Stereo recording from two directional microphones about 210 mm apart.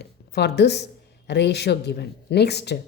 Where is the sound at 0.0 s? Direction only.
50° left (ahead or behind).